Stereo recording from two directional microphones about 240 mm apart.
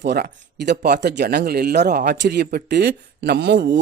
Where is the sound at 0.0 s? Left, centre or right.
Right.